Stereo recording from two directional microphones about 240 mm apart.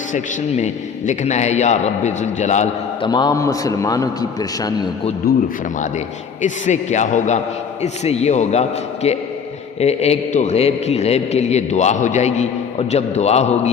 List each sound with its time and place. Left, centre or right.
0.1 s a man's voice: left
3.1 s a man's voice: centre
6.4 s a man's voice: left